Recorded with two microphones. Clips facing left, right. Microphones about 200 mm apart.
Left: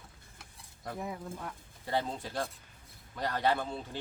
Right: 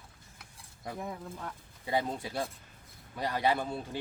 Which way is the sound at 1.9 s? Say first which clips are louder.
Right 2 dB; 10° right (ahead or behind).